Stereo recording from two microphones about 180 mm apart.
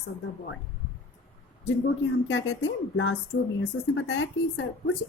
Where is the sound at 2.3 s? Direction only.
90° left.